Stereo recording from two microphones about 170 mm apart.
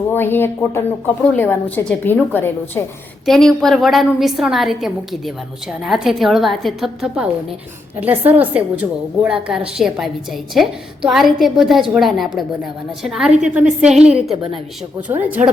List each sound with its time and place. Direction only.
0.1 s a woman's voice: 10° left (ahead or behind); by 15.4 s 10° right (ahead or behind)